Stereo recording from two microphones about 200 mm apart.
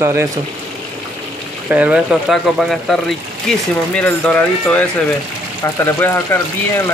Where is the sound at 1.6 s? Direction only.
5° right (ahead or behind); by 6.4 s 10° left (ahead or behind).